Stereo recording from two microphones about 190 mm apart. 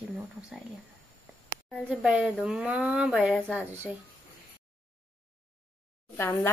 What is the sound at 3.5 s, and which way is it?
Speech, 10° right (ahead or behind).